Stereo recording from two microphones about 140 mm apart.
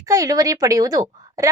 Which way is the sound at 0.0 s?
25° right (ahead or behind).